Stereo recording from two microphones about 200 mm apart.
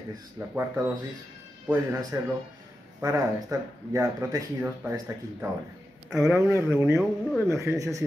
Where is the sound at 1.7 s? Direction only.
15° right (ahead or behind).